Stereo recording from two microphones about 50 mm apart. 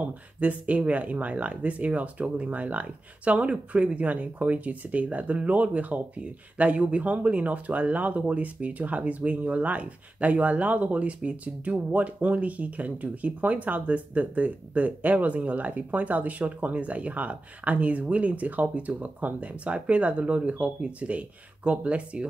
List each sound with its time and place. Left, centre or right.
0.4 s speech: right